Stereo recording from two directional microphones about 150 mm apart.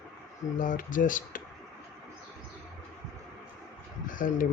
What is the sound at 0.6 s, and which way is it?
Speech, 65° left (ahead or behind).